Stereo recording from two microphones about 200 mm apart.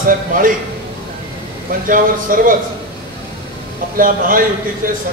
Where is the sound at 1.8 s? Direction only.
45° right (ahead or behind).